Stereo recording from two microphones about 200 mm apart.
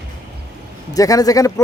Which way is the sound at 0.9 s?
15° left (ahead or behind).